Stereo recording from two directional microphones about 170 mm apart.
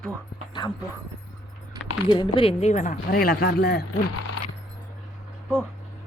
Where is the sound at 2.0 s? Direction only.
30° left (ahead or behind); by 3.8 s 65° left (ahead or behind).